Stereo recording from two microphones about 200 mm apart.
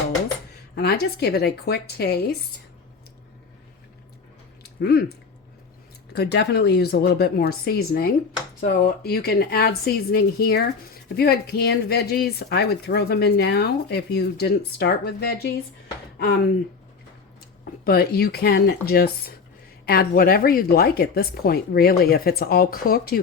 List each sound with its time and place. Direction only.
0.8 s speech: 50° left (ahead or behind)
4.6 s speech: 50° left (ahead or behind)
6.1 s speech: 55° left (ahead or behind)
17.8 s speech: 50° left (ahead or behind)